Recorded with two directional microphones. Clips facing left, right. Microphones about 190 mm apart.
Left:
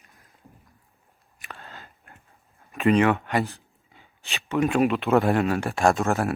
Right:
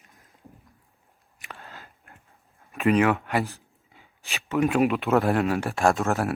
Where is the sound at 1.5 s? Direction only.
Centre (ahead or behind).